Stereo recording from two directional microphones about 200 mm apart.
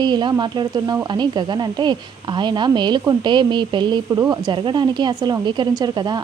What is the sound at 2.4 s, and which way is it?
Speech, 20° right (ahead or behind).